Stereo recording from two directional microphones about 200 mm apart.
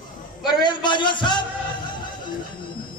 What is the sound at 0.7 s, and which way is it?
Speech, 25° left (ahead or behind).